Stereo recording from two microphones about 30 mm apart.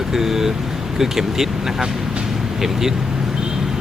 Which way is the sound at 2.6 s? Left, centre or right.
Centre.